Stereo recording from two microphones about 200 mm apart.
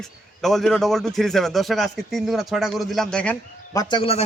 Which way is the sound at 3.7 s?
20° left (ahead or behind).